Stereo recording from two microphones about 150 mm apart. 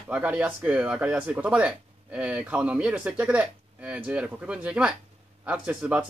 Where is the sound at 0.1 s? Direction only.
10° right (ahead or behind).